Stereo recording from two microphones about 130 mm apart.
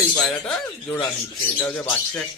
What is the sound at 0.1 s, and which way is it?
Speech, 10° left (ahead or behind).